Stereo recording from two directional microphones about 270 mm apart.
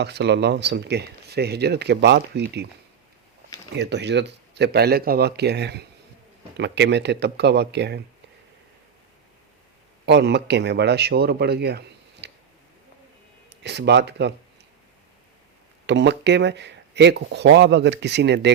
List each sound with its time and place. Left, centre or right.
0.0 s speech: right
3.8 s speech: right
10.1 s speech: right
12.2 s a sound: right
13.6 s speech: right
15.9 s speech: right